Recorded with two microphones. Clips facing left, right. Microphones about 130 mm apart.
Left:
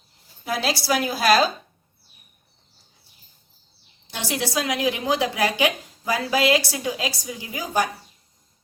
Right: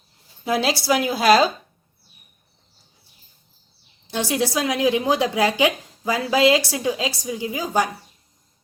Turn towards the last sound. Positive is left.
turn(degrees=-25)  # may be behind; listen again after turning